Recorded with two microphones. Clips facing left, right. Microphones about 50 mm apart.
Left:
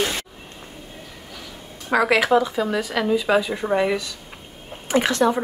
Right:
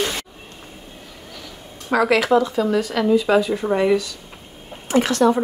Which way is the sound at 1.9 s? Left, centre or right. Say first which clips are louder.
Right 1 dB; centre.